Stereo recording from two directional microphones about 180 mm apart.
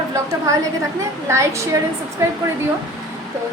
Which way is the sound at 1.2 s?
15° right (ahead or behind).